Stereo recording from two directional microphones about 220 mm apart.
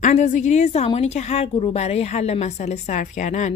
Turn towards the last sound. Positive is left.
turn(degrees=35)  # may be behind; listen again after turning